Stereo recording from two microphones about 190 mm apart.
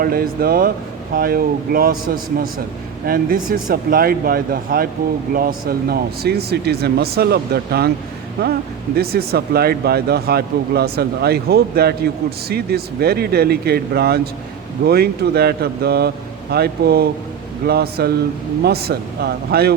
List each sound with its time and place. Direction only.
0.0 s speech: 50° right (ahead or behind)